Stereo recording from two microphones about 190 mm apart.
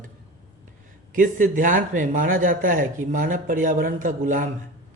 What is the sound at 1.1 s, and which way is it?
Speech, 45° right (ahead or behind).